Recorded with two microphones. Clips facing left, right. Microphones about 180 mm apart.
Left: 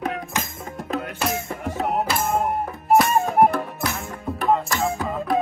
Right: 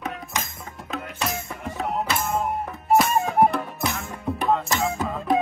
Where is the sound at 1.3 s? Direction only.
65° left (ahead or behind).